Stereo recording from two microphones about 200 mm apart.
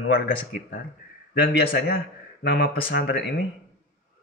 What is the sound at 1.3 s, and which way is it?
Speech, 55° left (ahead or behind).